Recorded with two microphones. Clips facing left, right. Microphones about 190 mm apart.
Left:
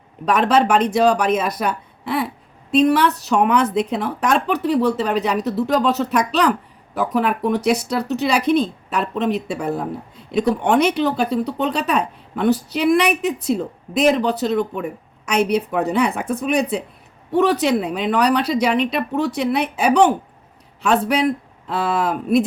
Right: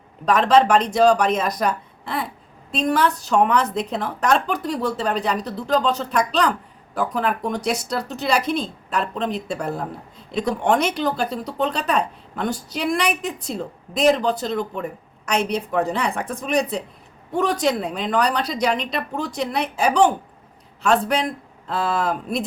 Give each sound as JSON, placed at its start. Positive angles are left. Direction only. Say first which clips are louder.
{"t": 0.3, "sound": "speech", "louder": "even", "side_deg": 5}